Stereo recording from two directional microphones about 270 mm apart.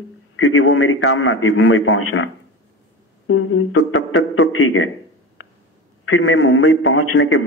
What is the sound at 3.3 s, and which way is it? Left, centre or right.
A man's voice, left.